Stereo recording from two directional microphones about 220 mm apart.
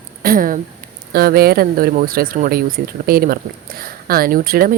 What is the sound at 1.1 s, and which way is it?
Speech, 45° right (ahead or behind).